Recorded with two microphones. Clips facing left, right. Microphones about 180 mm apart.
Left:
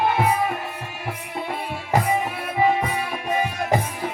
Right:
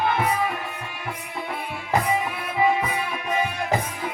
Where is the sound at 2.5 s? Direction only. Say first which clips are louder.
Left 1 dB; 45° left (ahead or behind).